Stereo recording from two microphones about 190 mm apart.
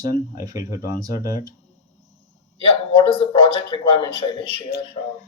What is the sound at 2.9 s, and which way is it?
A man's voice, 30° left (ahead or behind).